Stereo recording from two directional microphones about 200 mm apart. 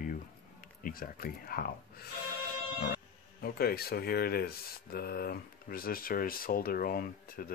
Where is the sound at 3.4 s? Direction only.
50° left (ahead or behind).